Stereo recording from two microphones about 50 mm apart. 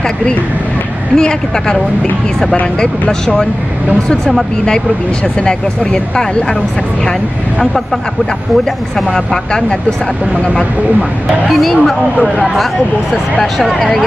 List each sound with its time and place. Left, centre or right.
1.1 s speech: centre
5.4 s speech: centre
8.9 s speech: centre
11.0 s speech: centre
13.4 s speech: centre